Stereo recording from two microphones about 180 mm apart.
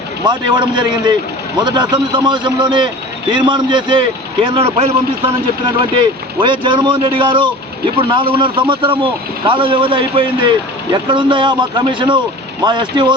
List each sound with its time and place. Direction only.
0.3 s a man's voice: 25° right (ahead or behind)